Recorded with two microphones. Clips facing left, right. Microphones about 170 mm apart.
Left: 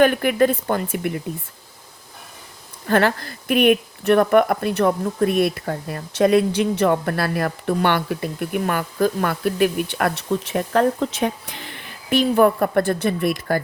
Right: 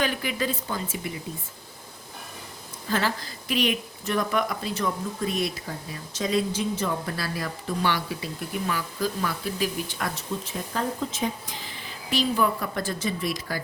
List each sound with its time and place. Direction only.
0.0 s speech: 55° left (ahead or behind)
2.8 s speech: 60° left (ahead or behind)